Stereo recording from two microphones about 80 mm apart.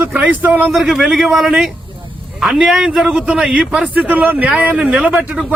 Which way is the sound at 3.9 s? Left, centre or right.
Right.